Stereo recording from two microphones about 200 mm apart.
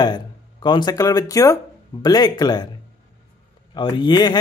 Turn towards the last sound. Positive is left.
turn(degrees=20)  # may be behind; listen again after turning